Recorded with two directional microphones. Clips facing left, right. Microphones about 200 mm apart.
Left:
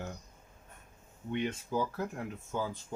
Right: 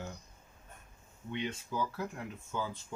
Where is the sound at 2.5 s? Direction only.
40° left (ahead or behind).